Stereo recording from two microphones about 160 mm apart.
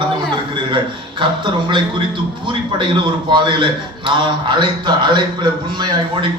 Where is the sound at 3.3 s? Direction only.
30° right (ahead or behind).